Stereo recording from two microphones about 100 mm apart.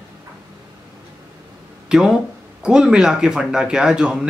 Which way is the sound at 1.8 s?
5° right (ahead or behind).